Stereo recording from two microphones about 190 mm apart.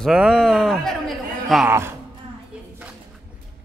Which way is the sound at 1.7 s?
15° right (ahead or behind).